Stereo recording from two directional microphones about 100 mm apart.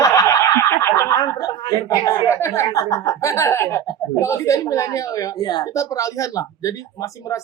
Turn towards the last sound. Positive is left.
turn(degrees=35)  # may be behind; listen again after turning